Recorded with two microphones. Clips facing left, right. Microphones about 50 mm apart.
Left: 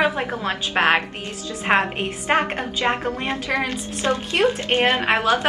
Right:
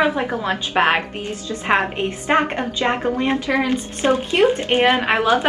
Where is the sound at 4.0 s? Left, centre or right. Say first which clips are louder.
Right 3 dB; right.